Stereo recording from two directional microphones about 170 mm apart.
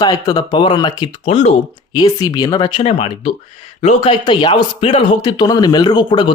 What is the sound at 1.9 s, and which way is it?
Speech, 25° left (ahead or behind).